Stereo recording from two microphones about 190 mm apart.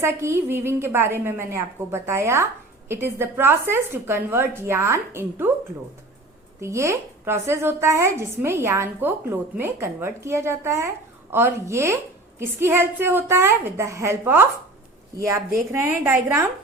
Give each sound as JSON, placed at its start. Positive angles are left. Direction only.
{"t": 0.0, "sound": "a woman's voice", "side_deg": -15}
{"t": 6.6, "sound": "a woman's voice", "side_deg": -15}